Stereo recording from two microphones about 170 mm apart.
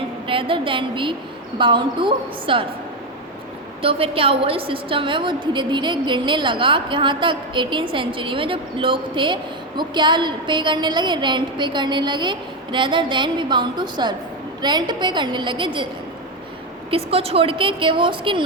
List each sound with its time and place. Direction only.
0.3 s a woman's voice: 30° right (ahead or behind)
3.8 s a woman's voice: 35° right (ahead or behind)
16.9 s a woman's voice: 35° right (ahead or behind)